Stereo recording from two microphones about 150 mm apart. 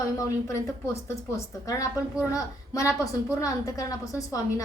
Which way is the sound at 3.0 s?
20° left (ahead or behind).